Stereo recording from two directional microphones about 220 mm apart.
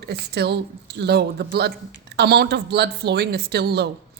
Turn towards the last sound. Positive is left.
turn(degrees=-50)  # may be behind; listen again after turning